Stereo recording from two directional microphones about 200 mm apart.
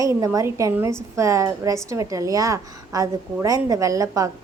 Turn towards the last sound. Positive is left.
turn(degrees=-15)  # may be behind; listen again after turning